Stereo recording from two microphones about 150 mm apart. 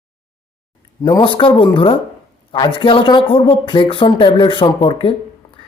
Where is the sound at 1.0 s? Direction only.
35° left (ahead or behind).